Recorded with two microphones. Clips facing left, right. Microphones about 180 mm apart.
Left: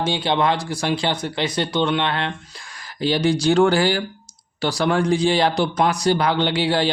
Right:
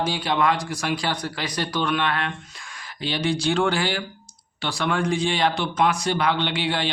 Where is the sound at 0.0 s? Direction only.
25° left (ahead or behind).